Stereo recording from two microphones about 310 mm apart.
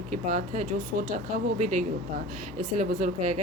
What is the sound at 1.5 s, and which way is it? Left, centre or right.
Speech, right.